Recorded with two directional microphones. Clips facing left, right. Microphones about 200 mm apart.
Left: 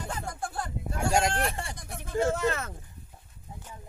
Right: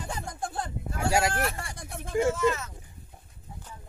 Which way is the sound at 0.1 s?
20° right (ahead or behind).